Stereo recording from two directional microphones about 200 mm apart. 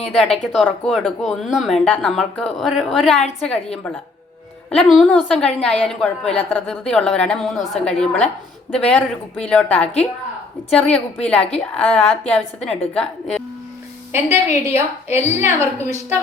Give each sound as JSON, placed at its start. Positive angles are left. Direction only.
{"t": 0.1, "sound": "speech", "side_deg": 0}
{"t": 4.7, "sound": "speech", "side_deg": 0}
{"t": 6.2, "sound": "a woman's voice", "side_deg": 30}
{"t": 6.5, "sound": "speech", "side_deg": 5}
{"t": 14.1, "sound": "a woman's voice", "side_deg": -10}